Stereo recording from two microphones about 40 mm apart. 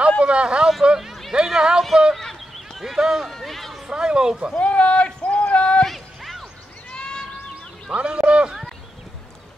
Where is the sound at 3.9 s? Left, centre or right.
Right.